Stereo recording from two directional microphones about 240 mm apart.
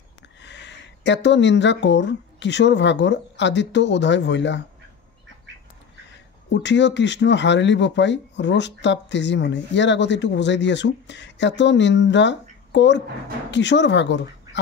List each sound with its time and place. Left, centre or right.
0.4 s speech: left
6.5 s speech: left